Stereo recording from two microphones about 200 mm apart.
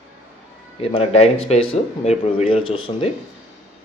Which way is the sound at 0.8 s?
30° left (ahead or behind).